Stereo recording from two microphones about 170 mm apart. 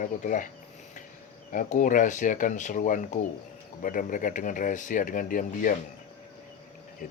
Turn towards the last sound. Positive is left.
turn(degrees=55)  # may be behind; listen again after turning